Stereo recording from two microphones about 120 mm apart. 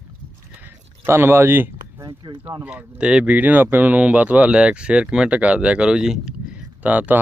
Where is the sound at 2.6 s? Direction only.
10° right (ahead or behind).